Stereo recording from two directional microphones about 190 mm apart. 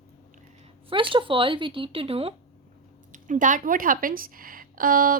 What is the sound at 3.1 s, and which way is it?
A woman's voice, 45° right (ahead or behind).